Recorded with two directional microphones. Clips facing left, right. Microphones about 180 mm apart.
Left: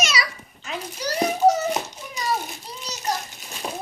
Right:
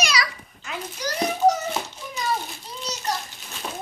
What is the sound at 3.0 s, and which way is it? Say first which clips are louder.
Children playing: left 4 dB; 20° left (ahead or behind).